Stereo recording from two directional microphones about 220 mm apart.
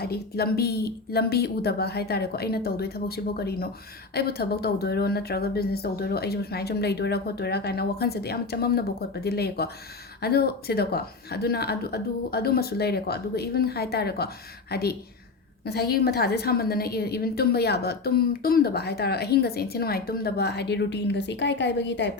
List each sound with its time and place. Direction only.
0.0 s a woman's voice: 45° left (ahead or behind)